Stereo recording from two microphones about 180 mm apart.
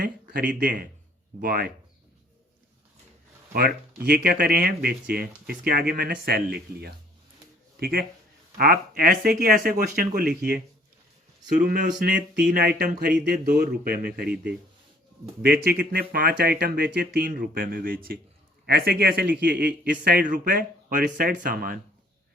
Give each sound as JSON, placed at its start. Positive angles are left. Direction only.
{"t": 0.0, "sound": "a man's voice", "side_deg": -55}
{"t": 3.5, "sound": "a man's voice", "side_deg": -60}
{"t": 12.5, "sound": "a man's voice", "side_deg": -60}
{"t": 15.4, "sound": "a man's voice", "side_deg": -60}